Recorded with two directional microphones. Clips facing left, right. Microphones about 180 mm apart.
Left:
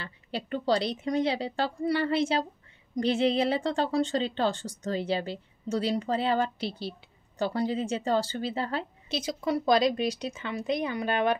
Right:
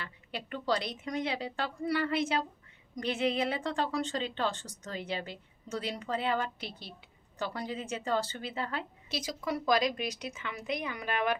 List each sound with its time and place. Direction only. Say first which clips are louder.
0.0 s speech: left 5 dB; 30° left (ahead or behind)